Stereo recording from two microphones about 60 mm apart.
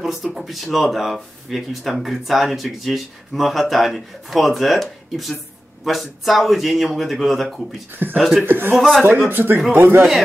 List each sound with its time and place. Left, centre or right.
0.0 s speech: centre
7.9 s speech: right
8.2 s speech: centre
8.5 s speech: right